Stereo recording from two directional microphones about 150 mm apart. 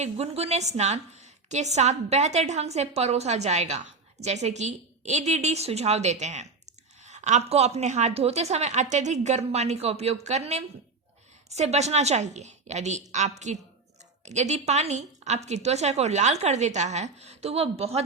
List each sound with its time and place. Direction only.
0.0 s a woman's voice: 45° right (ahead or behind)